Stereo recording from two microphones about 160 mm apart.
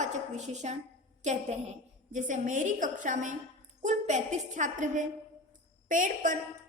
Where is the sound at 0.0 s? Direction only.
50° right (ahead or behind).